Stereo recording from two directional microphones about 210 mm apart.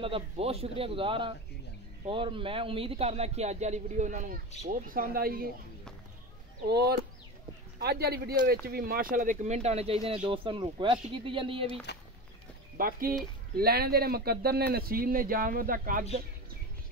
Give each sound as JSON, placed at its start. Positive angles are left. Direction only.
{"t": 0.0, "sound": "a man's voice", "side_deg": -25}
{"t": 6.7, "sound": "a man's voice", "side_deg": -50}
{"t": 11.9, "sound": "speech", "side_deg": 50}
{"t": 12.7, "sound": "speech", "side_deg": -45}